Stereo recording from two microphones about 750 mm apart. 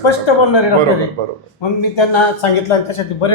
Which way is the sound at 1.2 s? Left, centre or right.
Right.